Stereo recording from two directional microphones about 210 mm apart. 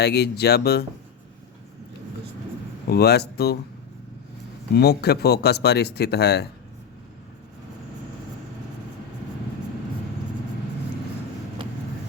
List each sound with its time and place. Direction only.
0.0 s speech: 50° left (ahead or behind)
2.9 s speech: 50° left (ahead or behind)
4.7 s speech: 50° left (ahead or behind)